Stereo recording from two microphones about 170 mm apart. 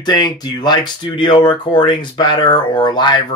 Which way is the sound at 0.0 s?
25° left (ahead or behind).